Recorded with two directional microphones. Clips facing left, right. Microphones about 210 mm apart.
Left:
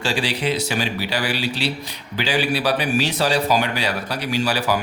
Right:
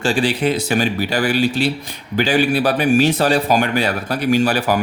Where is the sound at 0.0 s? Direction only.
50° right (ahead or behind).